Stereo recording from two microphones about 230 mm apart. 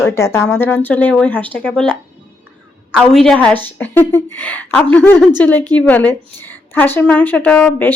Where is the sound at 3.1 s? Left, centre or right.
Centre.